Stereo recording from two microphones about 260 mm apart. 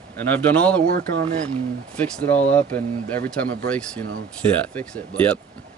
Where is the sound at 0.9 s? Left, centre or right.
Right.